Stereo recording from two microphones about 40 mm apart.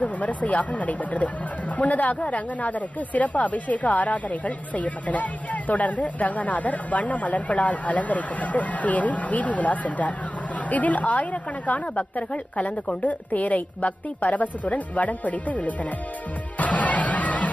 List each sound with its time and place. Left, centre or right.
0.0 s speech: left
16.5 s music: left